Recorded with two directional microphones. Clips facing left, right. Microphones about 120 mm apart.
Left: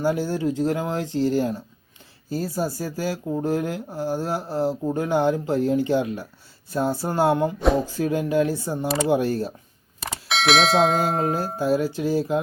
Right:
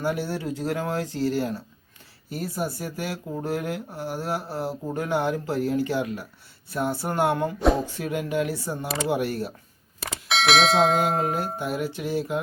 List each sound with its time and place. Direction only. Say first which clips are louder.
0.0 s speech: left 5 dB; 30° left (ahead or behind)
10.0 s speech: even; centre (ahead or behind)
11.3 s speech: left 5 dB; 30° left (ahead or behind)